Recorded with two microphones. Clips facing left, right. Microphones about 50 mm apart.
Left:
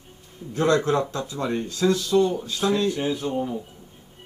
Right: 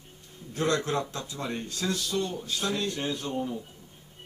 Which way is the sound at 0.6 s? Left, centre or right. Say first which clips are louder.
Left 7 dB; left.